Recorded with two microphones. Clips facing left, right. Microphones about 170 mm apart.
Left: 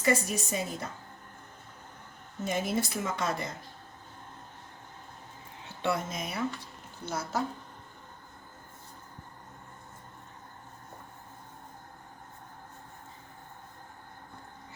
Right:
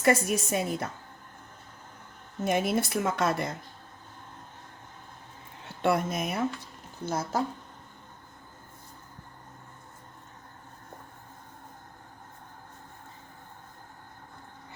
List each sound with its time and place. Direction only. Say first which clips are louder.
0.0 s speech: right 4 dB; 60° right (ahead or behind)
2.4 s speech: right 4 dB; 60° right (ahead or behind)
5.8 s a woman's voice: right 5 dB; 55° right (ahead or behind)